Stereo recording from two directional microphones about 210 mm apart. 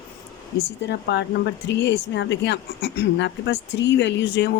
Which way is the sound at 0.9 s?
55° left (ahead or behind).